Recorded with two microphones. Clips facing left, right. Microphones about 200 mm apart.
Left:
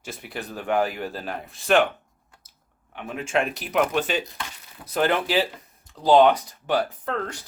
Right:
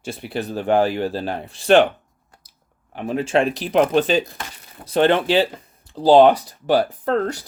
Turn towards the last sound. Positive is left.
turn(degrees=-40)  # may be behind; listen again after turning